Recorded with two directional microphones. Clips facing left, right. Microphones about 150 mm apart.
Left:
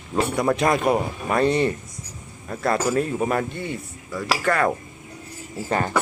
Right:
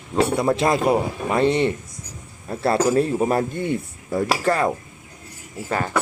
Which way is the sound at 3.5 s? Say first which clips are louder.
Right 6 dB; 50° right (ahead or behind).